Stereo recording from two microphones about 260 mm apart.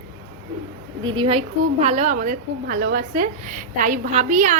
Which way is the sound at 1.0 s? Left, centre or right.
Centre.